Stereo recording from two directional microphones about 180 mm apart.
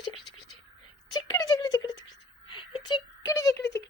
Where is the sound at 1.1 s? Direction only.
20° left (ahead or behind).